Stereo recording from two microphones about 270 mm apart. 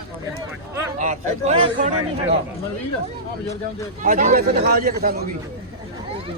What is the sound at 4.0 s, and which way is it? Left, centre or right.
A man's voice, right.